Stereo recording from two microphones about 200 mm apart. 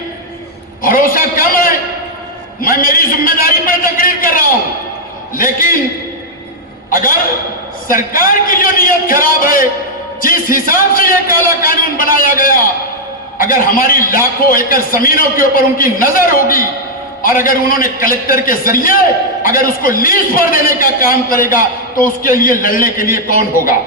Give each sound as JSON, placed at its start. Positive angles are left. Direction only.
{"t": 0.8, "sound": "a man's voice", "side_deg": 45}
{"t": 6.9, "sound": "a man's voice", "side_deg": 45}